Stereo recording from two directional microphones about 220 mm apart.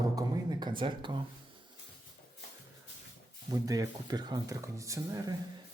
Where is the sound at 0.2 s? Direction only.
20° right (ahead or behind).